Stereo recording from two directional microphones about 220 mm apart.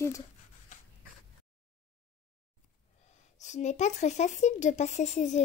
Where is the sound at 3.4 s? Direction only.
30° left (ahead or behind).